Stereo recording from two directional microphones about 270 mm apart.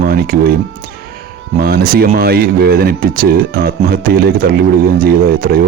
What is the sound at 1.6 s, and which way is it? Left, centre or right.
Speech, right.